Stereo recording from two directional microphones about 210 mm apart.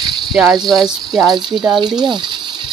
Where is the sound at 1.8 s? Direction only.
20° right (ahead or behind).